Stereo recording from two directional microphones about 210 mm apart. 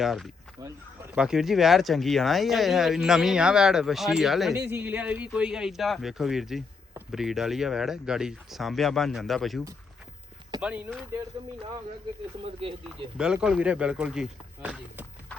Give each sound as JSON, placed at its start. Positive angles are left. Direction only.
{"t": 0.0, "sound": "speech", "side_deg": 0}
{"t": 0.6, "sound": "speech", "side_deg": -15}
{"t": 1.1, "sound": "speech", "side_deg": -5}
{"t": 13.1, "sound": "speech", "side_deg": -5}